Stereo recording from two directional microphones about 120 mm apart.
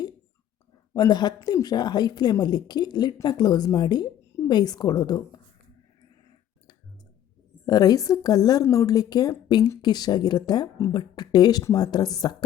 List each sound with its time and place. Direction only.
0.9 s a woman's voice: 35° left (ahead or behind)
7.6 s a woman's voice: 30° left (ahead or behind)